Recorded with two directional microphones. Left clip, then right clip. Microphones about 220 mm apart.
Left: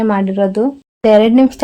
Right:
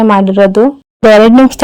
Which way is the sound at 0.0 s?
30° right (ahead or behind).